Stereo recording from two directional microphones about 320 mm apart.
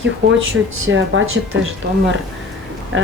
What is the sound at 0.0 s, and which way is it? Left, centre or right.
Speech, right.